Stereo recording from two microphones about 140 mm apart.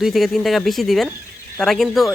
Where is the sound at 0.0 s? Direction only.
Centre (ahead or behind).